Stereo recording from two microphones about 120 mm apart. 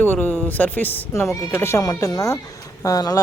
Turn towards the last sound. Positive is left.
turn(degrees=30)  # may be behind; listen again after turning